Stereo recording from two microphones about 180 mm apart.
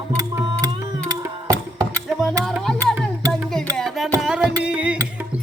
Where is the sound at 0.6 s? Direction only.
20° right (ahead or behind).